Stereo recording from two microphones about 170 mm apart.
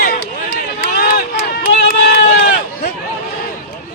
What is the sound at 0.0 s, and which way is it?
Run, 60° left (ahead or behind).